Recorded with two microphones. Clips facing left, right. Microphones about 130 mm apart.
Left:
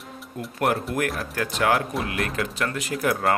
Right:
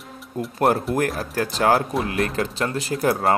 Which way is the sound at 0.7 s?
35° right (ahead or behind).